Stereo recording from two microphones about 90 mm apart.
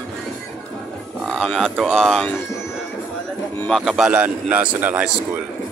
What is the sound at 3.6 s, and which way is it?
A man's voice, centre (ahead or behind).